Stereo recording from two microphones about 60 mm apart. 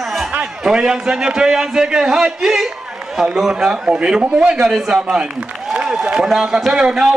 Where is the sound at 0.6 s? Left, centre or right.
Centre.